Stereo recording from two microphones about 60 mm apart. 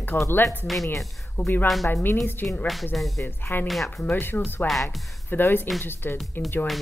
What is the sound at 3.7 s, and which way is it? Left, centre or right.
Speech, centre.